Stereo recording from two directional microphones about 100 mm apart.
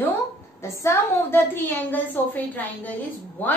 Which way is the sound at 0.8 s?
25° left (ahead or behind).